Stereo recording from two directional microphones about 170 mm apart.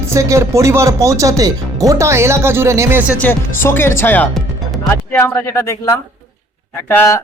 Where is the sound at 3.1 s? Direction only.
10° left (ahead or behind).